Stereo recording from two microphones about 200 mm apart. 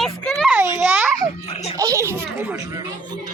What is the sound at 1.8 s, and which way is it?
A child's voice, 15° right (ahead or behind).